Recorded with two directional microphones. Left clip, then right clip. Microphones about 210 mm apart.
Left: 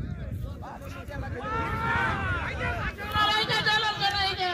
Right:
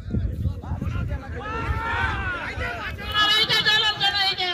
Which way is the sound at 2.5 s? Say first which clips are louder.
Right 2 dB; 55° right (ahead or behind).